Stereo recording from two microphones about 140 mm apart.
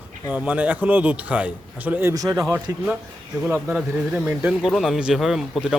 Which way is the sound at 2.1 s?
25° right (ahead or behind).